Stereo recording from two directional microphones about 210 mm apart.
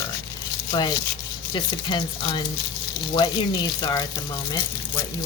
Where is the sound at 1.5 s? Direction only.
20° left (ahead or behind).